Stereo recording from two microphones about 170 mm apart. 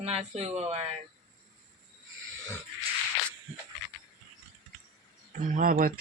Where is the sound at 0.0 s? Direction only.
40° right (ahead or behind).